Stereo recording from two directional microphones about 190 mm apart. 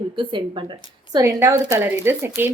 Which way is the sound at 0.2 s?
25° right (ahead or behind).